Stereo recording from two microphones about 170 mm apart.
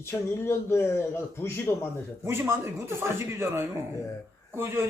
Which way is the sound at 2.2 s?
15° right (ahead or behind).